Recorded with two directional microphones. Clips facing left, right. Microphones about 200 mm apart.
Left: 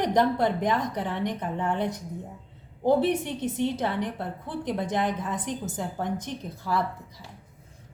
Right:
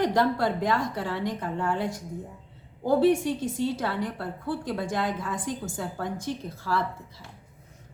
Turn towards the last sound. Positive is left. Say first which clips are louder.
# left 1 dB
turn(degrees=15)  # may be behind; listen again after turning